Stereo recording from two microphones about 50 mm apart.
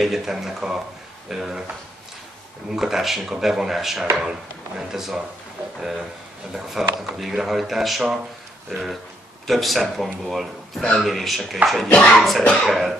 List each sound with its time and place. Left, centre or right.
0.0 s speech: centre
2.7 s speech: centre
6.5 s speech: centre
11.9 s speech: left
12.2 s speech: centre